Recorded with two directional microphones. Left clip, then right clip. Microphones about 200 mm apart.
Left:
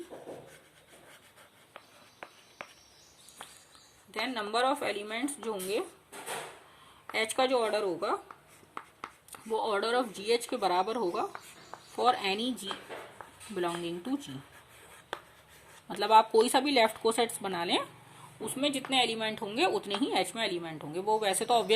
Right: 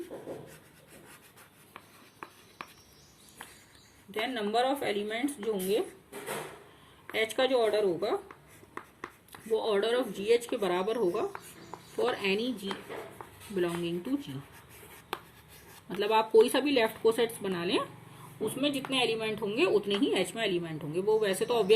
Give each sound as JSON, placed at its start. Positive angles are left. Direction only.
{"t": 4.2, "sound": "a woman's voice", "side_deg": 55}
{"t": 7.1, "sound": "a woman's voice", "side_deg": 50}
{"t": 9.5, "sound": "a woman's voice", "side_deg": 50}
{"t": 16.0, "sound": "a woman's voice", "side_deg": 50}